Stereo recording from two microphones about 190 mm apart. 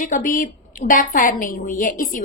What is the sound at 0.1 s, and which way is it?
A woman's voice, 45° left (ahead or behind).